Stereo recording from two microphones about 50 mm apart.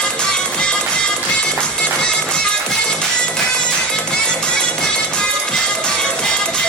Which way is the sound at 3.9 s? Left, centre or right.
Centre.